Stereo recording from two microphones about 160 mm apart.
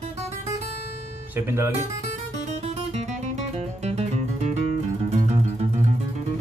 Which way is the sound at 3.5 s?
40° right (ahead or behind).